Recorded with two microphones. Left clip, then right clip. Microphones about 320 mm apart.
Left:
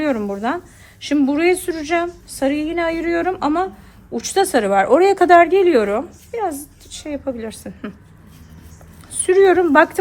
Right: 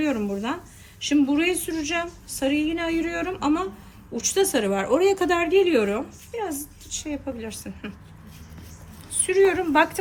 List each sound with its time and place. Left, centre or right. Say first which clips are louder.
0.0 s a woman's voice: left 6 dB; left
9.1 s a woman's voice: left 7 dB; left